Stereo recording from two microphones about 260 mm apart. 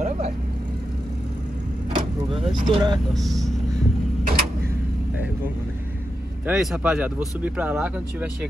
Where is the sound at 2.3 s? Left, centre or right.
Centre.